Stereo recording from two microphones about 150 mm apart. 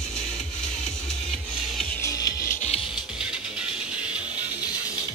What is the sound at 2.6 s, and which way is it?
Music, 40° left (ahead or behind).